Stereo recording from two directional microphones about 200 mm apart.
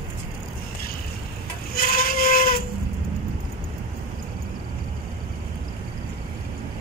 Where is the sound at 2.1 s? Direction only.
45° left (ahead or behind).